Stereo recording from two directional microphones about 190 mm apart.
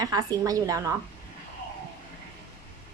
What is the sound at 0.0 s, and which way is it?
Speech, 20° right (ahead or behind).